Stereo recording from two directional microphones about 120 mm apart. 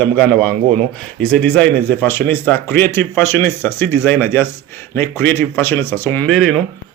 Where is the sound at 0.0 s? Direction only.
10° left (ahead or behind).